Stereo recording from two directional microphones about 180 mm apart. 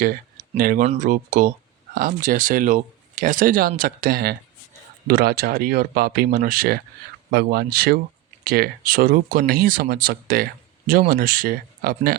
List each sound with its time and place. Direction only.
0.0 s speech: 50° right (ahead or behind)